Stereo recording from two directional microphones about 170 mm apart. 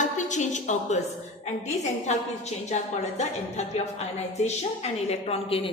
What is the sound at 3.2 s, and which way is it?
A woman's voice, 40° left (ahead or behind).